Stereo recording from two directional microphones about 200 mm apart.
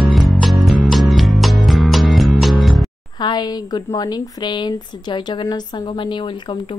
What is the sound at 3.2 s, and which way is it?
Speech, 20° left (ahead or behind).